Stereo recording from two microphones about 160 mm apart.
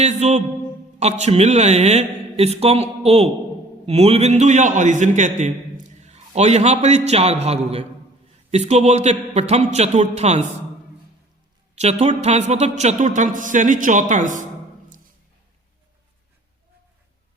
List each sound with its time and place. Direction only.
0.0 s a man's voice: 45° right (ahead or behind)
11.7 s a man's voice: 45° right (ahead or behind)